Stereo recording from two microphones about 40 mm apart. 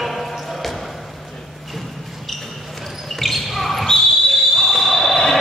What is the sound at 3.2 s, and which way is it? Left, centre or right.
Basketball bounce, centre.